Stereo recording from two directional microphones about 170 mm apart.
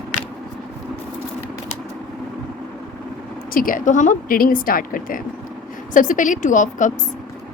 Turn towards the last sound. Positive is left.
turn(degrees=50)  # may be behind; listen again after turning